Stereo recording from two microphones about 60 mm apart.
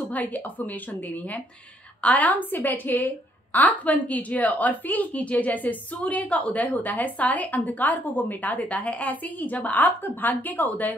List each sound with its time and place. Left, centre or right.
0.1 s a woman's voice: left